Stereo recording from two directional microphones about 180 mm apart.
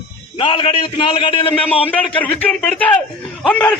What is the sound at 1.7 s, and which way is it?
A man's voice, 10° left (ahead or behind).